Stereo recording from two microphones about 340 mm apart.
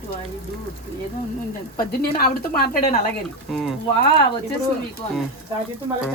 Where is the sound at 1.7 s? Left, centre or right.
Left.